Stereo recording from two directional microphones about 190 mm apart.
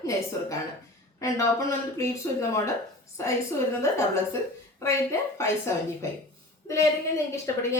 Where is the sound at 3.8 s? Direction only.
15° left (ahead or behind).